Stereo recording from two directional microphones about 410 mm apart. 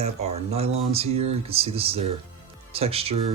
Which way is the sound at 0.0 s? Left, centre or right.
Centre.